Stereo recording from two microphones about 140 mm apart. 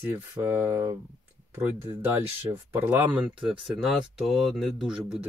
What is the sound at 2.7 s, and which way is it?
Speech, 15° right (ahead or behind).